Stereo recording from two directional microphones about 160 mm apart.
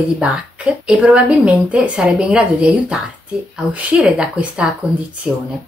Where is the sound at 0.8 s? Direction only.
5° right (ahead or behind).